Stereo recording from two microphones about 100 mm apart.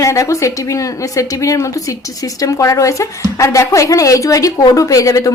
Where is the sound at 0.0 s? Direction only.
30° left (ahead or behind).